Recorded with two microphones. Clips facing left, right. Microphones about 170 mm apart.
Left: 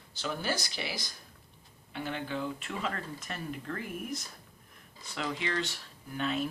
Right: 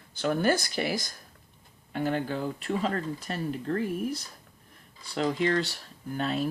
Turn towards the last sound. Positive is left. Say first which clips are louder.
# right 3 dB
turn(degrees=-40)  # may be behind; listen again after turning